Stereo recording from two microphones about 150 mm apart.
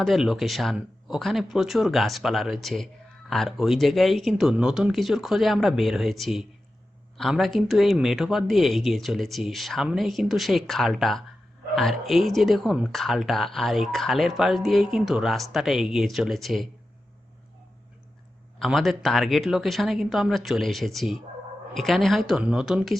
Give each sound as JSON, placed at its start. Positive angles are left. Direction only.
{"t": 0.0, "sound": "speech", "side_deg": 0}
{"t": 18.6, "sound": "speech", "side_deg": 0}